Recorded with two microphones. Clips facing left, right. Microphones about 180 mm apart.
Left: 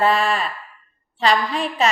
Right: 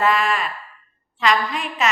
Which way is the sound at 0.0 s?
30° left (ahead or behind).